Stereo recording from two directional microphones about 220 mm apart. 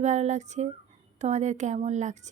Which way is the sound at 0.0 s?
30° right (ahead or behind).